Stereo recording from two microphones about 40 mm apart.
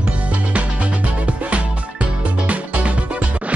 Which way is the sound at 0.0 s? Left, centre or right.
Right.